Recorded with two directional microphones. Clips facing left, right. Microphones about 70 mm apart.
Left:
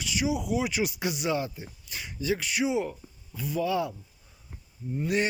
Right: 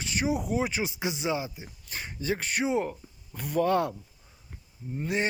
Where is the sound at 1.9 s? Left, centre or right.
Right.